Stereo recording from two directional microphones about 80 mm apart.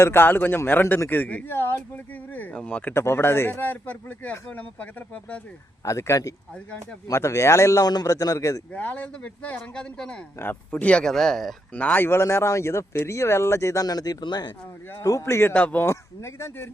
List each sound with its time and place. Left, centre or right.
0.0 s speech: left
2.9 s speech: left
5.8 s a man's voice: left
7.9 s a man's voice: left
8.7 s speech: centre
10.3 s speech: left
11.0 s speech: centre
11.7 s speech: centre; by 14.5 s left
15.0 s speech: left
15.5 s speech: left
15.9 s speech: left